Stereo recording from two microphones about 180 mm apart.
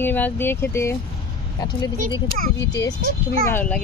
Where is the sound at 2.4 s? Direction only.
45° right (ahead or behind).